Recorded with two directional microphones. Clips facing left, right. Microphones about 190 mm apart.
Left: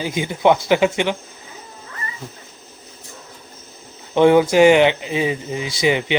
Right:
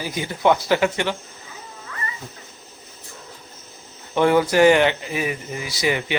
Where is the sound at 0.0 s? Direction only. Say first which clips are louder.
Left 3 dB; 20° left (ahead or behind).